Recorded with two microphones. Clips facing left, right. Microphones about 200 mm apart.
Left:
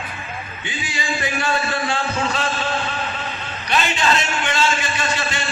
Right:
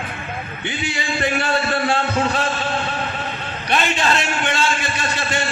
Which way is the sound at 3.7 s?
50° right (ahead or behind).